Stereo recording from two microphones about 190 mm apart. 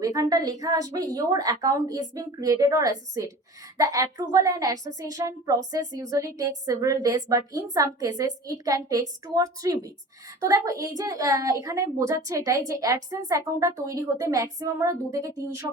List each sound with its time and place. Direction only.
0.0 s a woman's voice: 20° right (ahead or behind)